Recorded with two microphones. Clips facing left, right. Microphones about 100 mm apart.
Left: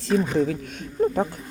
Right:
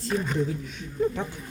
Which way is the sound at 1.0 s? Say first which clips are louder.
Left 5 dB; 40° left (ahead or behind).